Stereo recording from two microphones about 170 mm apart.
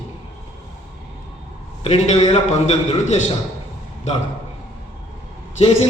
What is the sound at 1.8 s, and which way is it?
A man's voice, 40° left (ahead or behind).